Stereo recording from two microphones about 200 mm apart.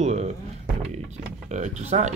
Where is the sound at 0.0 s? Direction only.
35° right (ahead or behind).